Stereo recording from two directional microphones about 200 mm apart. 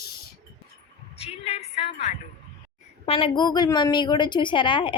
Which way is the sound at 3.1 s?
25° left (ahead or behind).